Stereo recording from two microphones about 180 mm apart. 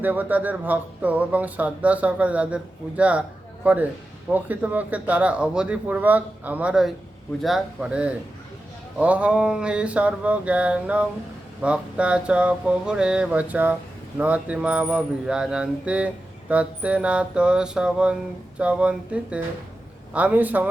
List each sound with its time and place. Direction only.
0.0 s mantra: 10° right (ahead or behind)
7.4 s speech: 5° right (ahead or behind)
9.0 s mantra: 10° right (ahead or behind)